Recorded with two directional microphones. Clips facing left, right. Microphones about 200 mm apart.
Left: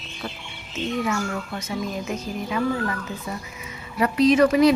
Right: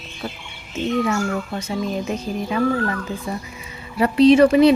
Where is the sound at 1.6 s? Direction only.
30° right (ahead or behind).